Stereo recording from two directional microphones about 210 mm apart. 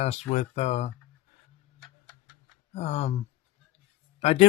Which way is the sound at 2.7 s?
30° left (ahead or behind).